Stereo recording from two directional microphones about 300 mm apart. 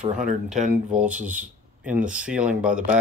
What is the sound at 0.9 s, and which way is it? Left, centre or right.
Speech, centre.